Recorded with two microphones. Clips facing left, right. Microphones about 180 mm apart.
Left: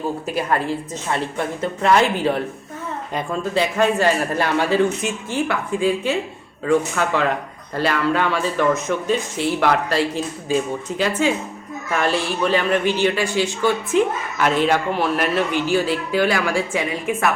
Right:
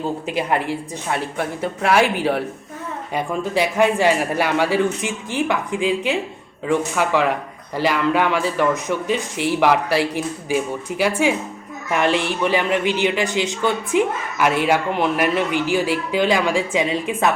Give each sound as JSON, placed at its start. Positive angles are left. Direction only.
{"t": 0.3, "sound": "a man's voice", "side_deg": -20}